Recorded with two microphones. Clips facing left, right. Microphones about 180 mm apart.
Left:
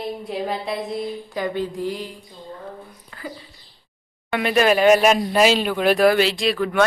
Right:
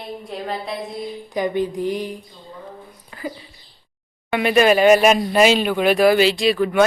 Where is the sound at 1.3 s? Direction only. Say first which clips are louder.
Right 6 dB; 15° right (ahead or behind).